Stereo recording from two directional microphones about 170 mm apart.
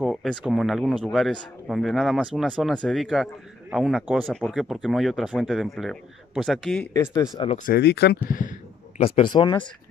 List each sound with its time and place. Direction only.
0.0 s speech: centre (ahead or behind)
6.9 s speech: 15° left (ahead or behind)
7.5 s speech: 60° left (ahead or behind); by 8.2 s 75° left (ahead or behind)
8.3 s a sound: 50° left (ahead or behind)
9.0 s speech: 30° left (ahead or behind)